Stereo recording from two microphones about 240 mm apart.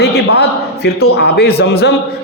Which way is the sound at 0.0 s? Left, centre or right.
Left.